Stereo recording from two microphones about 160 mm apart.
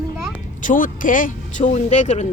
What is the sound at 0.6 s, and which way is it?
Speech, 55° left (ahead or behind).